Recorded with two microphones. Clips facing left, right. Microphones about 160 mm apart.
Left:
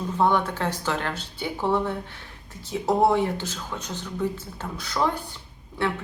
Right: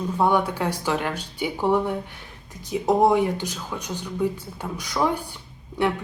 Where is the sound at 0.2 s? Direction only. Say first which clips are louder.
Right 1 dB; 10° right (ahead or behind).